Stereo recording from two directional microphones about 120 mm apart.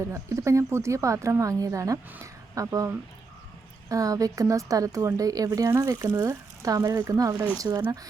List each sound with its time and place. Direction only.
0.0 s speech: 25° right (ahead or behind)